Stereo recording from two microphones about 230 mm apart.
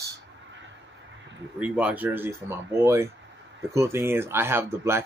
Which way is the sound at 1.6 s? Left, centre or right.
Centre.